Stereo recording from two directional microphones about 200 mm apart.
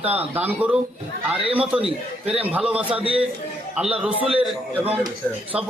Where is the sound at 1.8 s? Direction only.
30° right (ahead or behind).